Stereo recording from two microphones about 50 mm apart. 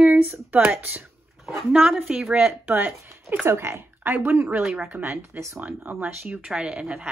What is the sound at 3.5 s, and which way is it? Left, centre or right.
Speech, right.